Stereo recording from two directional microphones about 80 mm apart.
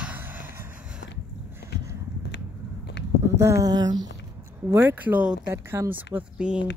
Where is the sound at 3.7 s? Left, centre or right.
Right.